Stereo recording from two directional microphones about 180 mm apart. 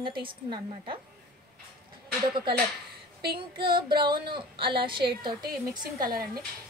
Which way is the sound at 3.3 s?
30° right (ahead or behind).